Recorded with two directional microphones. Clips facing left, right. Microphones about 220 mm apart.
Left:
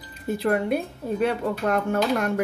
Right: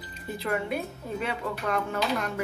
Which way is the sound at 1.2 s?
45° left (ahead or behind).